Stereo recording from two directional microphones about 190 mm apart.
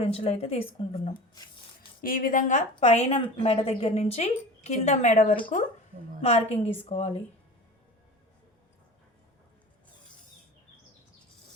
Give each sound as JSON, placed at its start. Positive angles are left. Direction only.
{"t": 0.0, "sound": "a woman's voice", "side_deg": 30}
{"t": 2.0, "sound": "a woman's voice", "side_deg": 50}